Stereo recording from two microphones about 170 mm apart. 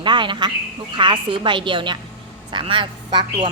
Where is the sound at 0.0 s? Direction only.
30° right (ahead or behind).